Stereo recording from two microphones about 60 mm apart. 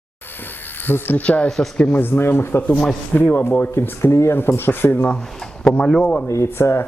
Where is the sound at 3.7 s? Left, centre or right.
Left.